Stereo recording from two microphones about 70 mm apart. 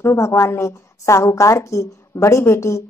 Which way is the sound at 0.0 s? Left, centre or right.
Left.